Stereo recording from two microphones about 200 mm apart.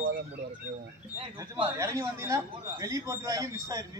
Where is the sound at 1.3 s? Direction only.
25° right (ahead or behind).